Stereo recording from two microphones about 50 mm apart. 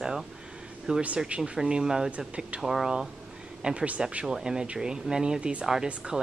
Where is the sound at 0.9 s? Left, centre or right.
Centre.